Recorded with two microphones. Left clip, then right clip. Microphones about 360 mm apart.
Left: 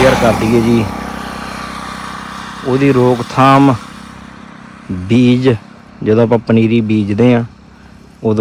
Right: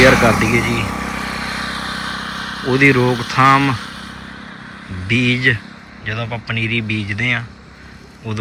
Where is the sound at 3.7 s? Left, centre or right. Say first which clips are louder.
Right 1 dB; left.